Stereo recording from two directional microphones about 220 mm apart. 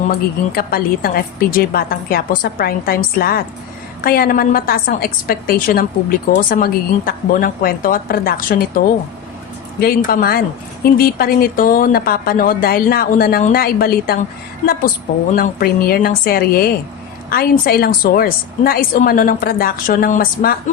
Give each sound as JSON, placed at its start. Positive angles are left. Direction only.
{"t": 0.1, "sound": "a woman's voice", "side_deg": 40}
{"t": 9.8, "sound": "a woman's voice", "side_deg": 40}
{"t": 15.4, "sound": "a woman's voice", "side_deg": 40}